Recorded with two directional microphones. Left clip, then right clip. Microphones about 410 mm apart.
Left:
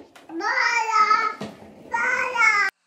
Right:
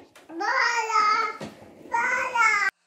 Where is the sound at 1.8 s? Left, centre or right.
Centre.